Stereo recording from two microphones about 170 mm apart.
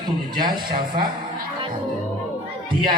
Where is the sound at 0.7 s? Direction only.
60° right (ahead or behind).